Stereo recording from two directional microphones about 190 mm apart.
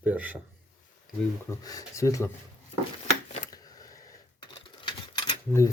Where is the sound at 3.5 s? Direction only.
20° left (ahead or behind).